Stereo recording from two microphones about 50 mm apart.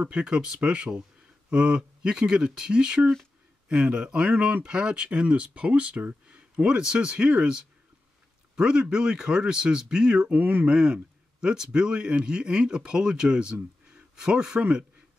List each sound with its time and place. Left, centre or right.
0.1 s speech: centre
10.3 s speech: right
14.6 s speech: right